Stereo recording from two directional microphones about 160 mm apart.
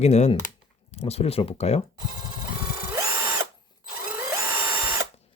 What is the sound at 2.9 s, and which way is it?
Drill, 20° right (ahead or behind).